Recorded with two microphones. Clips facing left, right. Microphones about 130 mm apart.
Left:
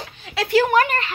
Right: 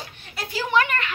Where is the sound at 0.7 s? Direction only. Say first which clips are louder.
Left 3 dB; 35° left (ahead or behind).